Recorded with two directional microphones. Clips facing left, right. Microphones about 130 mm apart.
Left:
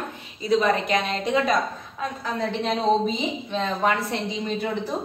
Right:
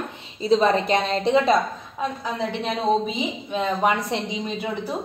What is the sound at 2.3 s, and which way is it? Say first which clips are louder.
A woman's voice: left 4 dB; 5° right (ahead or behind).